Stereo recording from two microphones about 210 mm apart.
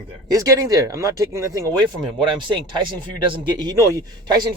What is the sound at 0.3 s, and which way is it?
Speech, 15° right (ahead or behind).